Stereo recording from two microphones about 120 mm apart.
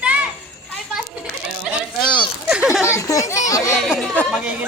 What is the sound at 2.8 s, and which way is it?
Children playing, 25° left (ahead or behind).